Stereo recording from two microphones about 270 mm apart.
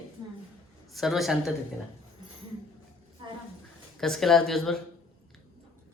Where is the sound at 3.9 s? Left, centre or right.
Centre.